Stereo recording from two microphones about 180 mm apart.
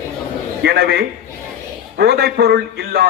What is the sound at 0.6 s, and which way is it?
A man's voice, 60° right (ahead or behind).